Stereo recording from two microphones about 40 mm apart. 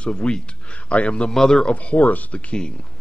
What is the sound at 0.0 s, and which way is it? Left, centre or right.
A man's voice, left.